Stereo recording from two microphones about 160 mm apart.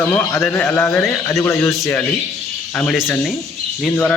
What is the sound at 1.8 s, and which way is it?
A man's voice, 10° left (ahead or behind).